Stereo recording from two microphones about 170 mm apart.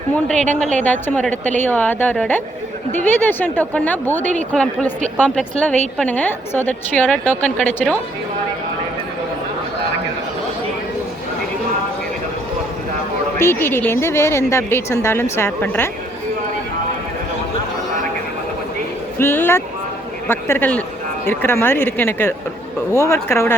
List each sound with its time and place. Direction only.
0.3 s a woman's voice: 10° left (ahead or behind)
13.4 s a woman's voice: 15° left (ahead or behind)
19.2 s a woman's voice: 15° left (ahead or behind)